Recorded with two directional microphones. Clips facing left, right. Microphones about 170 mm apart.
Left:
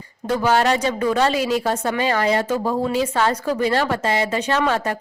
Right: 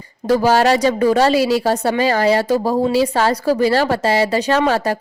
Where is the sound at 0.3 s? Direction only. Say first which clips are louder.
Right 5 dB; 35° right (ahead or behind).